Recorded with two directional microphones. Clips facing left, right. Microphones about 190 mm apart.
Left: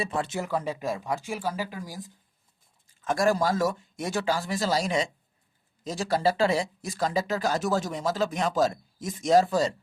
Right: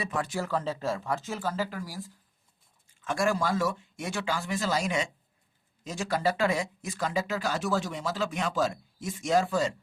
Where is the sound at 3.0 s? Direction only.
40° left (ahead or behind).